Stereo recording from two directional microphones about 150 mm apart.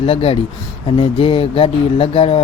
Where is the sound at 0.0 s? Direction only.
40° left (ahead or behind).